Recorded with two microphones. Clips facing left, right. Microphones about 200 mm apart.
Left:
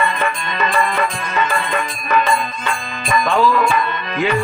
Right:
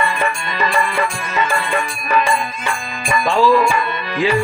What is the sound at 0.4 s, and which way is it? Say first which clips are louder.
Music: even; 30° right (ahead or behind).